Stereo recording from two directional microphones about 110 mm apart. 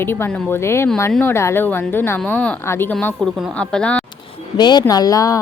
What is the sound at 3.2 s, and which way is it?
Speech, centre (ahead or behind).